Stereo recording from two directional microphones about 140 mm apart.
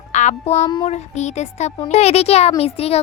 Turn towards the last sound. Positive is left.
turn(degrees=45)  # may be behind; listen again after turning